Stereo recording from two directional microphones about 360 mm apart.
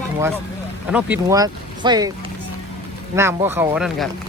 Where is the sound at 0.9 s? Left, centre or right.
Centre.